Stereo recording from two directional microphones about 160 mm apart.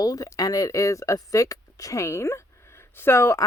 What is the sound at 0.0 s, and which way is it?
Speech, 20° left (ahead or behind).